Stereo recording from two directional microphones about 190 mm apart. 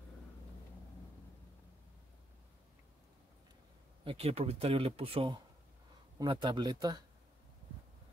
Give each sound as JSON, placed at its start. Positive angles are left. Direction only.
{"t": 4.0, "sound": "speech", "side_deg": -30}